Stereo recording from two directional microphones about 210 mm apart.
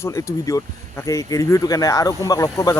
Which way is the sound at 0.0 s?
15° left (ahead or behind).